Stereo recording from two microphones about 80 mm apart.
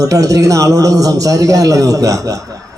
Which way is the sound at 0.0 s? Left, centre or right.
Right.